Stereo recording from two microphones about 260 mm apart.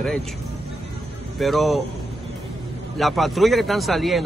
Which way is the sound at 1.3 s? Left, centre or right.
Centre.